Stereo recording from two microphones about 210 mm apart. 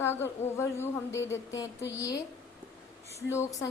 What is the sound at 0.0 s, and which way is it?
A woman's voice, 10° left (ahead or behind).